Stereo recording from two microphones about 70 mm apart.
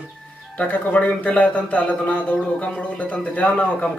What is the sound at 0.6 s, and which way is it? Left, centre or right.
Speech, left.